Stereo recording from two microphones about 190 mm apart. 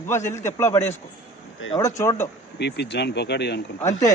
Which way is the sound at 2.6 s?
65° left (ahead or behind).